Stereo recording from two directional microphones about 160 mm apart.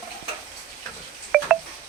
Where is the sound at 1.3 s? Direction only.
5° right (ahead or behind).